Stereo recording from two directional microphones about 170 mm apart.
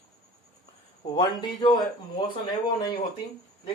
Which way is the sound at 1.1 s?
25° left (ahead or behind).